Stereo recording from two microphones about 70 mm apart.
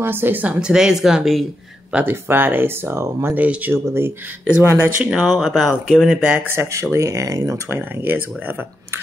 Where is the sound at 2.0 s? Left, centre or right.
Right.